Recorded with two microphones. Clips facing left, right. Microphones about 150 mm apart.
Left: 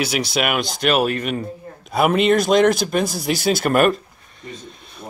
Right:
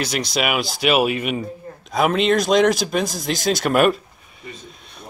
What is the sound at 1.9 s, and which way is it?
Speech, 5° left (ahead or behind).